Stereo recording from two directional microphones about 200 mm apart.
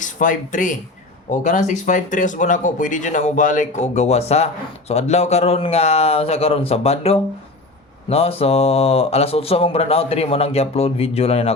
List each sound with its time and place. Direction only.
0.0 s speech: 40° left (ahead or behind)